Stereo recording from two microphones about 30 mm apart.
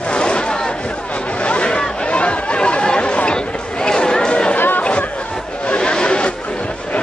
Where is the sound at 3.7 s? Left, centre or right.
Left.